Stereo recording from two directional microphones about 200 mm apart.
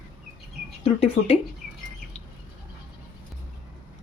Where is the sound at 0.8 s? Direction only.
30° left (ahead or behind).